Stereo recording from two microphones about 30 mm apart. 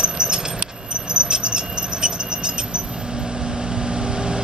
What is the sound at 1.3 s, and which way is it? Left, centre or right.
Mouse, right.